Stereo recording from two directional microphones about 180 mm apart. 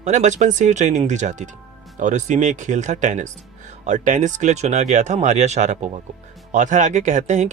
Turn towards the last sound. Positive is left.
turn(degrees=-40)  # may be behind; listen again after turning